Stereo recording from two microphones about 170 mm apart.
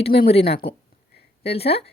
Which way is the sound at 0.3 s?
35° left (ahead or behind).